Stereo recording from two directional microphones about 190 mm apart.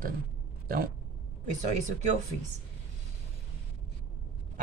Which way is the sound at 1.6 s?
35° right (ahead or behind).